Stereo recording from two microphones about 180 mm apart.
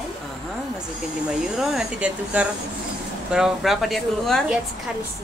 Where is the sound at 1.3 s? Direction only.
5° right (ahead or behind).